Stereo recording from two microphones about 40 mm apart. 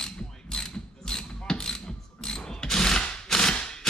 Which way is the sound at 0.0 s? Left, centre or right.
Centre.